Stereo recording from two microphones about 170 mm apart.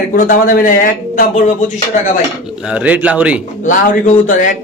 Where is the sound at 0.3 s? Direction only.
55° left (ahead or behind).